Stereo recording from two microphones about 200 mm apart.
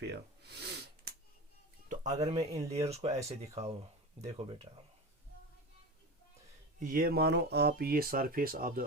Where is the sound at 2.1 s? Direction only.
20° right (ahead or behind).